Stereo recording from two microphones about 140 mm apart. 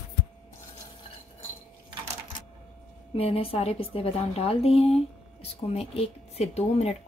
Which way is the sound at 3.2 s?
45° left (ahead or behind).